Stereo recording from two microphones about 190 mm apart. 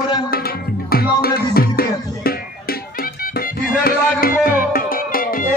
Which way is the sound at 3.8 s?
50° left (ahead or behind).